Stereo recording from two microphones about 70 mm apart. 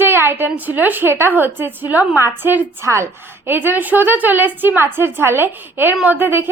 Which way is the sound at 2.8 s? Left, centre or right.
Right.